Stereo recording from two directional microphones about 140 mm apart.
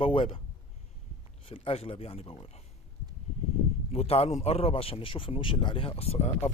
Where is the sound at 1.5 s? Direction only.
45° left (ahead or behind).